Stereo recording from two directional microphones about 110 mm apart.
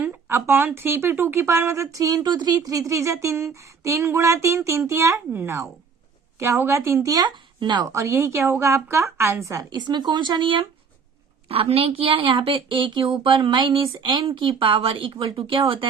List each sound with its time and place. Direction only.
0.0 s speech: 20° right (ahead or behind); by 7.9 s 45° right (ahead or behind)
7.9 s speech: 25° right (ahead or behind)
9.6 s speech: 40° right (ahead or behind)